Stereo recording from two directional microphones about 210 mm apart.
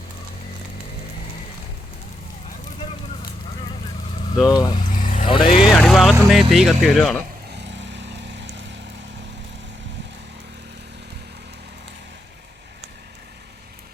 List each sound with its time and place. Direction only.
4.4 s speech: 15° left (ahead or behind)
4.8 s vehicle: 40° left (ahead or behind)
5.3 s vehicle: 25° left (ahead or behind)
5.7 s vehicle: 5° left (ahead or behind)
6.1 s speech: centre (ahead or behind)
7.5 s lawn mower: 55° right (ahead or behind)